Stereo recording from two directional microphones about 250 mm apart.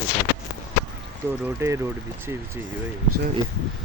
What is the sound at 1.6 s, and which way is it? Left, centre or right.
Speech, centre.